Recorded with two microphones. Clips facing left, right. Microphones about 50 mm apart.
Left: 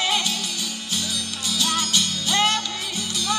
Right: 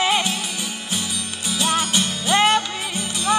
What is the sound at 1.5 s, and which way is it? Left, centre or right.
Music, right.